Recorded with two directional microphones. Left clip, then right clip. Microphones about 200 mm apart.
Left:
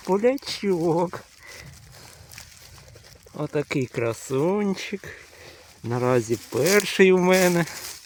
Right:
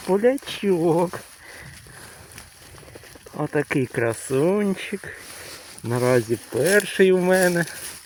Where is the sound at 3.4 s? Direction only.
Centre (ahead or behind); by 7.6 s 25° left (ahead or behind).